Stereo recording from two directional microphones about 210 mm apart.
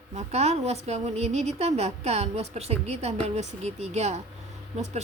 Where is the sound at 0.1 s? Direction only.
30° right (ahead or behind).